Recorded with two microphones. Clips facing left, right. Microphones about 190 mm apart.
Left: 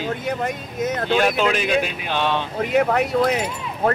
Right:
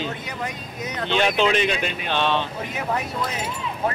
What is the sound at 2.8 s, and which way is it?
Speech, 65° left (ahead or behind).